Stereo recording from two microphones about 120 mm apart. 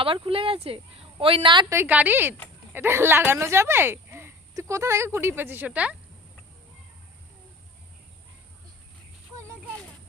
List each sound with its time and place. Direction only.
0.0 s a woman's voice: 50° right (ahead or behind)
1.7 s a woman's voice: 15° right (ahead or behind)